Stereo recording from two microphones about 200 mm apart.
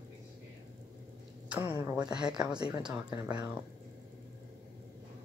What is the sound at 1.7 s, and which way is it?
Speech, 15° right (ahead or behind).